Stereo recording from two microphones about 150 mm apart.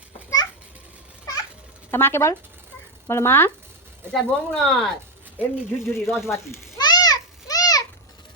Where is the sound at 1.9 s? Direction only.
15° left (ahead or behind).